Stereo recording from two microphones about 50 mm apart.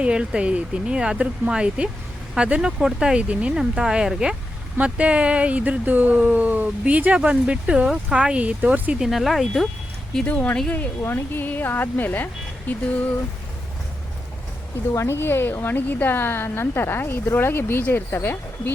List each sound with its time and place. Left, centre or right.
0.0 s speech: centre
4.8 s speech: right
9.0 s speech: centre
10.2 s speech: left
11.0 s a woman's voice: left
14.9 s a woman's voice: left